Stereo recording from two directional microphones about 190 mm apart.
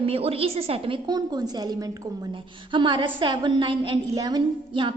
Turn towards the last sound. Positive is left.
turn(degrees=-25)  # may be behind; listen again after turning